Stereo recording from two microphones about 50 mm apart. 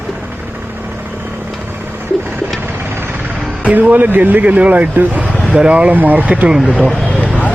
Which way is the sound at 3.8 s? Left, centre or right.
Right.